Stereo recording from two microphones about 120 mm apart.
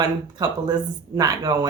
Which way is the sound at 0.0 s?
35° right (ahead or behind).